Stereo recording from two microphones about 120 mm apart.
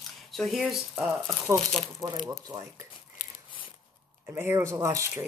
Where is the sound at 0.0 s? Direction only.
Centre (ahead or behind).